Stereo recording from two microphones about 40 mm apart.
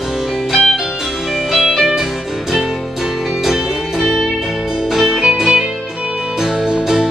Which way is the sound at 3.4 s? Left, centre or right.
Centre.